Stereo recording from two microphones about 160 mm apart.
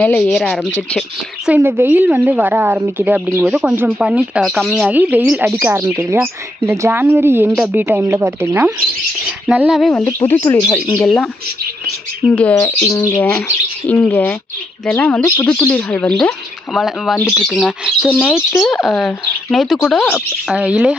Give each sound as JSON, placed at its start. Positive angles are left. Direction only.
{"t": 0.0, "sound": "speech", "side_deg": 5}
{"t": 1.5, "sound": "speech", "side_deg": -15}
{"t": 4.9, "sound": "speech", "side_deg": -10}
{"t": 9.9, "sound": "speech", "side_deg": 15}
{"t": 12.3, "sound": "speech", "side_deg": 10}
{"t": 18.1, "sound": "speech", "side_deg": 10}
{"t": 18.5, "sound": "speech", "side_deg": 0}